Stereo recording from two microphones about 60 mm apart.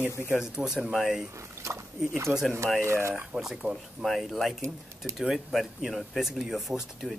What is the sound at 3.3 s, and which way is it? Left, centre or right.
Speech, centre.